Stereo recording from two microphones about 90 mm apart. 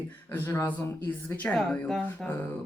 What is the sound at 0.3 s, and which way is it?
Speech, 25° left (ahead or behind).